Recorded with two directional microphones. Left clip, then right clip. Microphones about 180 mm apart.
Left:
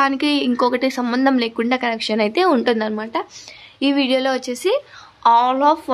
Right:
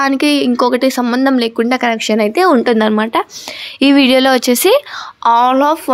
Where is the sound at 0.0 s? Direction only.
30° right (ahead or behind).